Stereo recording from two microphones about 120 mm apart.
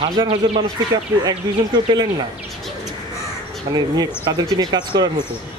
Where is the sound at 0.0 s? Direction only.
45° right (ahead or behind).